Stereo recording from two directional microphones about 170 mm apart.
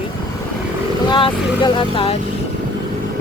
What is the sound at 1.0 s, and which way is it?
Speech, 30° left (ahead or behind).